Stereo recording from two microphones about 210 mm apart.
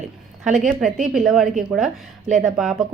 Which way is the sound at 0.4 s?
Centre (ahead or behind).